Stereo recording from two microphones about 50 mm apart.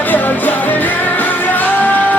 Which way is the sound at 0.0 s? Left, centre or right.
Left.